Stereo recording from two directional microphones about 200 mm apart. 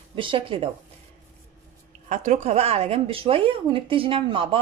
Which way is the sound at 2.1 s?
35° right (ahead or behind).